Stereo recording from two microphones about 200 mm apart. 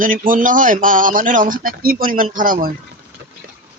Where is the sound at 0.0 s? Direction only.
40° right (ahead or behind).